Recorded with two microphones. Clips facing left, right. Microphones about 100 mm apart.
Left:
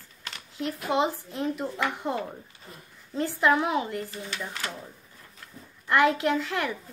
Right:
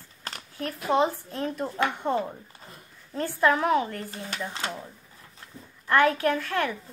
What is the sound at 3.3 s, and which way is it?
Speech, 15° left (ahead or behind).